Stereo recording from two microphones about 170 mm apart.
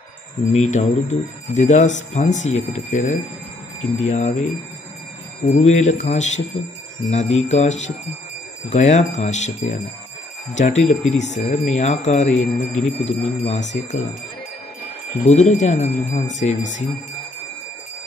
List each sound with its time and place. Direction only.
0.5 s speech: 45° left (ahead or behind)
5.5 s speech: 40° left (ahead or behind)
15.2 s speech: 45° left (ahead or behind)